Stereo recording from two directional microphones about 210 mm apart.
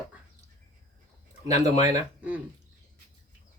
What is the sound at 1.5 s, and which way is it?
Speech, 30° left (ahead or behind).